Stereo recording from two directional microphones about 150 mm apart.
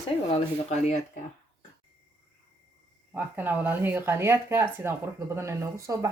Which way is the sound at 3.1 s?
10° right (ahead or behind).